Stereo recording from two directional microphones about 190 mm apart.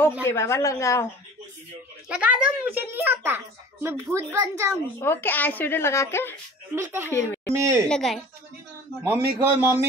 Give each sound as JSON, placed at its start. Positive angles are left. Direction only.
{"t": 0.2, "sound": "speech", "side_deg": 15}
{"t": 2.0, "sound": "a child's voice", "side_deg": -5}
{"t": 5.0, "sound": "speech", "side_deg": 10}
{"t": 6.7, "sound": "a child's voice", "side_deg": -10}
{"t": 7.1, "sound": "speech", "side_deg": 10}
{"t": 7.5, "sound": "a child's voice", "side_deg": -15}
{"t": 7.9, "sound": "a woman's voice", "side_deg": 0}
{"t": 9.0, "sound": "a child's voice", "side_deg": -10}